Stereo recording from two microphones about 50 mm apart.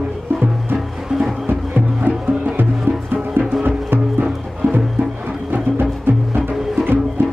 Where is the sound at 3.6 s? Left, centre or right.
Right.